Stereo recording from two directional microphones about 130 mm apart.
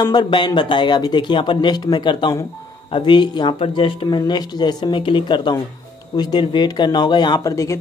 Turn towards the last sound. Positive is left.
turn(degrees=25)  # may be behind; listen again after turning